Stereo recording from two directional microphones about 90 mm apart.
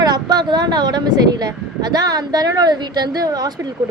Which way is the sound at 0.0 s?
50° right (ahead or behind).